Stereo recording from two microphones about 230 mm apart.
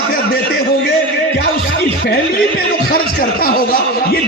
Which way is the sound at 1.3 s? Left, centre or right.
Left.